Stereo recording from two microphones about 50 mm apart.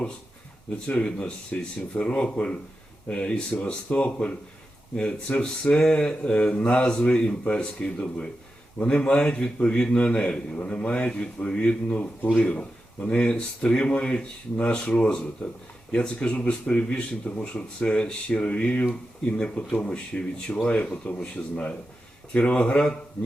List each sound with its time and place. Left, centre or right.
0.9 s speech: left
5.4 s speech: centre
10.6 s speech: left
12.2 s speech: left
12.5 s speech: left
22.3 s speech: left